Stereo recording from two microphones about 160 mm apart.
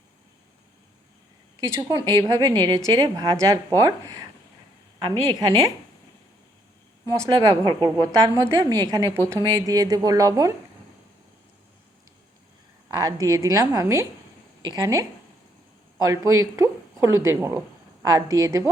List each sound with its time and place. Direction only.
1.6 s a woman's voice: 20° right (ahead or behind)
7.0 s a woman's voice: 25° right (ahead or behind)
13.0 s a woman's voice: 20° right (ahead or behind)
16.0 s a woman's voice: 20° right (ahead or behind)